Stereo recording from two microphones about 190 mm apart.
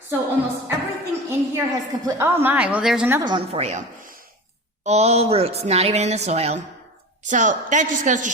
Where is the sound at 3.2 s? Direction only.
25° right (ahead or behind).